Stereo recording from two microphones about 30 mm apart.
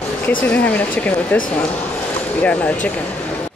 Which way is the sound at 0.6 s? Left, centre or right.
Left.